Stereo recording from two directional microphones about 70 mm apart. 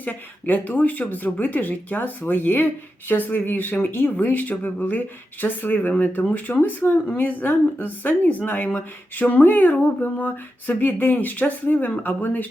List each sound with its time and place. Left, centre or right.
0.0 s speech: left